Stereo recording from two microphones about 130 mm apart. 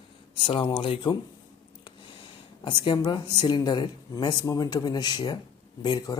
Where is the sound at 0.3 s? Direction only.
40° left (ahead or behind).